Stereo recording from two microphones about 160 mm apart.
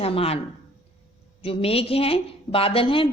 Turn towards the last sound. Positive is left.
turn(degrees=35)  # may be behind; listen again after turning